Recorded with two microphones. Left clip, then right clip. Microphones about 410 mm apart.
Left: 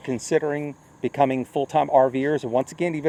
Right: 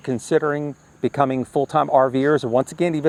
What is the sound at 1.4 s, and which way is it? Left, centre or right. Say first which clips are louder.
Speech: right 4 dB; right.